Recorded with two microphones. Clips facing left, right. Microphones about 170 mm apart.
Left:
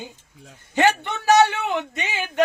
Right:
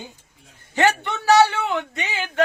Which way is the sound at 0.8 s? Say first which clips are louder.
Even; 20° left (ahead or behind).